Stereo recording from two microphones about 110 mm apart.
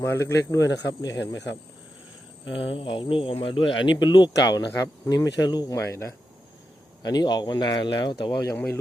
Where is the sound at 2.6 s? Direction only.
55° left (ahead or behind).